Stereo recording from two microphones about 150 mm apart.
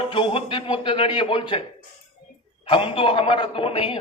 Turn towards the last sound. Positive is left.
turn(degrees=35)  # may be behind; listen again after turning